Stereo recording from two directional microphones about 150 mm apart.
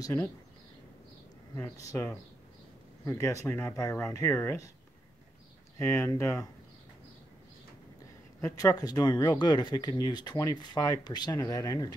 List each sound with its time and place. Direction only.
0.0 s speech: 20° left (ahead or behind)
3.1 s speech: 20° left (ahead or behind)
5.8 s speech: 15° left (ahead or behind)
8.4 s speech: 20° left (ahead or behind)